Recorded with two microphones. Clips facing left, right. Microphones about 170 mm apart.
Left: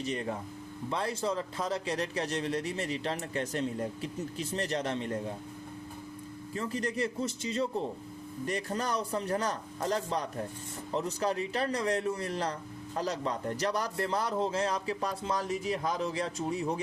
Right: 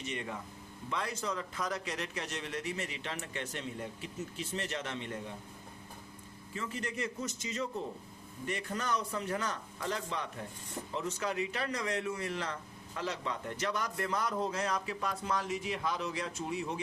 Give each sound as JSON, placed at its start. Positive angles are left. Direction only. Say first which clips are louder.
{"t": 0.0, "sound": "a man's voice", "louder": "left 6 dB", "side_deg": 35}
{"t": 6.5, "sound": "a man's voice", "louder": "left 5 dB", "side_deg": 40}